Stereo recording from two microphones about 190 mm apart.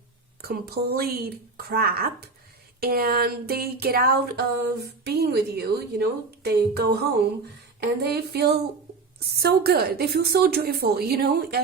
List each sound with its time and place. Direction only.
0.4 s a woman's voice: 55° right (ahead or behind)